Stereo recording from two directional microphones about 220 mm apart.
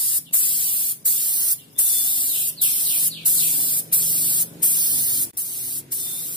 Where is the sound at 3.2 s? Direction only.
20° right (ahead or behind).